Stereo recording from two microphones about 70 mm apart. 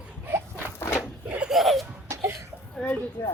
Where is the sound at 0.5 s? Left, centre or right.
Left.